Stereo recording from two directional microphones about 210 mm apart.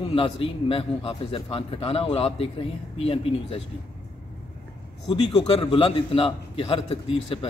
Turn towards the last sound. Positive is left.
turn(degrees=25)  # may be behind; listen again after turning